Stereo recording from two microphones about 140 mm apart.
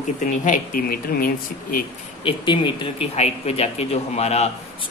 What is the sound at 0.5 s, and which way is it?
Speech, 90° left.